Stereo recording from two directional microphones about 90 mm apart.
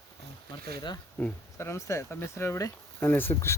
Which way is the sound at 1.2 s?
25° left (ahead or behind).